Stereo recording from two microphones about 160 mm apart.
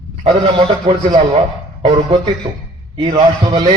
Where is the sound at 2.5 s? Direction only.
30° right (ahead or behind).